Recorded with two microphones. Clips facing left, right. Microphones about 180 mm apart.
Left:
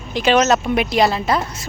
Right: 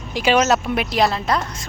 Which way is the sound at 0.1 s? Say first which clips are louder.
Left 2 dB; 10° right (ahead or behind).